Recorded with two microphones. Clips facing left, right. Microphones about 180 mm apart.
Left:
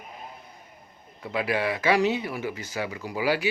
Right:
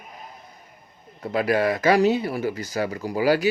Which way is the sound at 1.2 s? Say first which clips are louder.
Right 5 dB; 45° right (ahead or behind).